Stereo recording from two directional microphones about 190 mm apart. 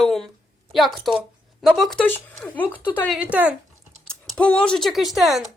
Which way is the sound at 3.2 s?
5° right (ahead or behind).